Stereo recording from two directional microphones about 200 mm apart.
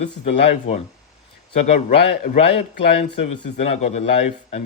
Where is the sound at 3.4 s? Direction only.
30° left (ahead or behind).